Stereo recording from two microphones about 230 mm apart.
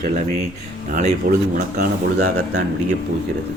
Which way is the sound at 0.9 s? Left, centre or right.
Right.